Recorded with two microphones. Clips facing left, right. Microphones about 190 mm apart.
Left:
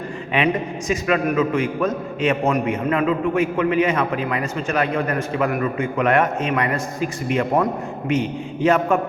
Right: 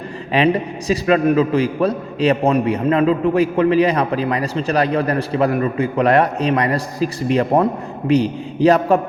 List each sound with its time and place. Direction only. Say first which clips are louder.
0.3 s a man's voice: right 4 dB; 35° right (ahead or behind)